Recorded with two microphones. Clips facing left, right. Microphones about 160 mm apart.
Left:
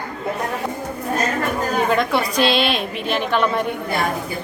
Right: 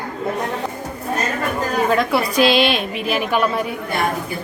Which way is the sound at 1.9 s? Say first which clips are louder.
Right 1 dB; 5° right (ahead or behind).